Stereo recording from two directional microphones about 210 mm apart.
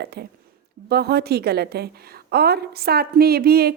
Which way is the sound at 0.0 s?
50° right (ahead or behind).